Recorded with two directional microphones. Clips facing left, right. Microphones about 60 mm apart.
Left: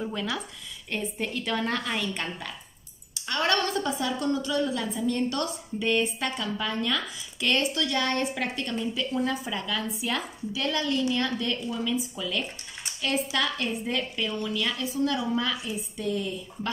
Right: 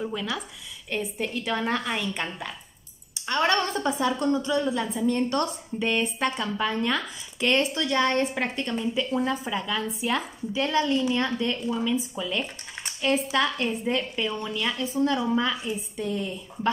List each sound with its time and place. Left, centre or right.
0.0 s a woman's voice: centre
3.3 s a woman's voice: right